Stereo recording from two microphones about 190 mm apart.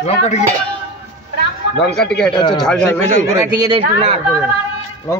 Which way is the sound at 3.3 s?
20° right (ahead or behind).